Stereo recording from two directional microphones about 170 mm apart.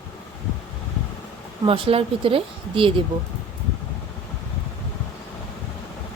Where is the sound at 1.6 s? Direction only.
30° right (ahead or behind).